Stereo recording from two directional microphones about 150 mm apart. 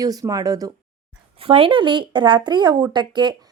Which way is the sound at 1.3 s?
40° right (ahead or behind).